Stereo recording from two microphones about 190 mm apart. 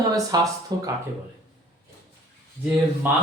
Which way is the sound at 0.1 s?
20° right (ahead or behind).